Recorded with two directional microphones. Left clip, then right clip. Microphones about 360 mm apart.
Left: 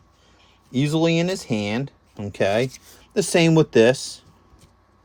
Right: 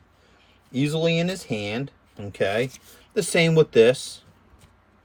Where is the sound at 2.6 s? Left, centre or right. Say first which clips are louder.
Left 4 dB; centre.